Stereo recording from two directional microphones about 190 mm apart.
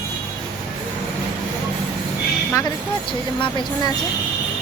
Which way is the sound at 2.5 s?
15° left (ahead or behind).